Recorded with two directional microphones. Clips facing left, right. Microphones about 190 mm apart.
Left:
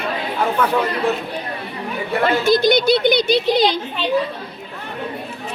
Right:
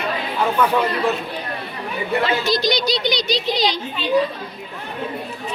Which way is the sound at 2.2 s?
55° left (ahead or behind).